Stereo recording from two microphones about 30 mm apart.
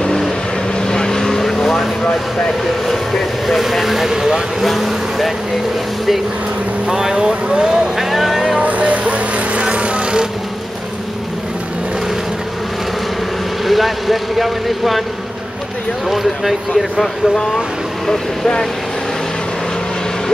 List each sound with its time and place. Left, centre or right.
0.8 s vehicle: left
1.4 s vehicle: centre
2.9 s vehicle: centre
3.8 s speech: centre
4.1 s speech: centre
4.6 s speech: centre
6.9 s speech: right
8.1 s vehicle: centre
8.5 s vehicle: right
9.6 s vehicle: right
13.7 s speech: centre
16.1 s speech: centre
18.0 s speech: centre